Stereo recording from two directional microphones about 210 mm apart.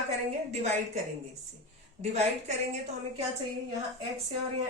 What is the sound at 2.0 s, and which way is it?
A woman's voice, 30° right (ahead or behind).